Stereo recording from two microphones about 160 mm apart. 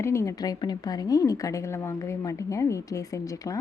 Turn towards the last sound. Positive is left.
turn(degrees=20)  # may be behind; listen again after turning